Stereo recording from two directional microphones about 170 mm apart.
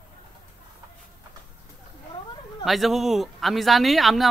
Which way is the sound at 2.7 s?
Centre (ahead or behind).